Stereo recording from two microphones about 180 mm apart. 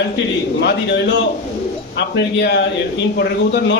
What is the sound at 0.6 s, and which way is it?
A man's voice, 65° left (ahead or behind).